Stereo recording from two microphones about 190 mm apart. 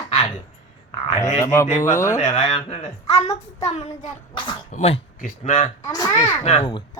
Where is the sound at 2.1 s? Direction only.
35° left (ahead or behind).